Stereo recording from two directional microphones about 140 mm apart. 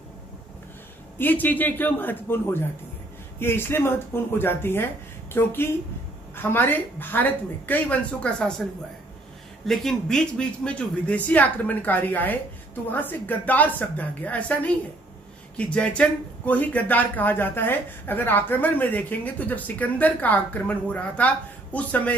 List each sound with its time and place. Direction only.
1.1 s speech: 15° left (ahead or behind)
9.7 s speech: 5° left (ahead or behind)